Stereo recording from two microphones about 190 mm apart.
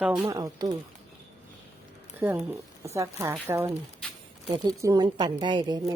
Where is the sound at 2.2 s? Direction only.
10° right (ahead or behind).